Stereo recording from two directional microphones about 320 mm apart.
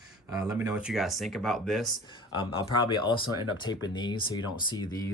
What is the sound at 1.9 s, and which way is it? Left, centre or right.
Speech, centre.